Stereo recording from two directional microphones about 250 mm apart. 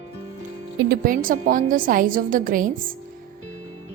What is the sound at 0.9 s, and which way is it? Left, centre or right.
A woman's voice, right.